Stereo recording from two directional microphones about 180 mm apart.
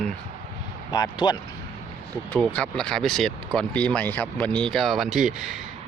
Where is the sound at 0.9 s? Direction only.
20° left (ahead or behind).